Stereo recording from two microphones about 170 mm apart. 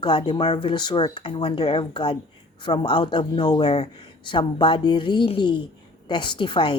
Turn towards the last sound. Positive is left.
turn(degrees=30)  # may be behind; listen again after turning